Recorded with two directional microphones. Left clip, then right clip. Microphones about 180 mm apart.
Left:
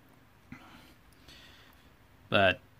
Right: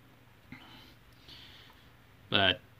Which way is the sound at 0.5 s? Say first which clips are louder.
Right 1 dB; 40° left (ahead or behind).